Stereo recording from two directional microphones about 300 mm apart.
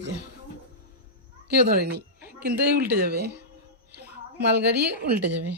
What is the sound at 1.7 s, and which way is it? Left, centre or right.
A woman's voice, right.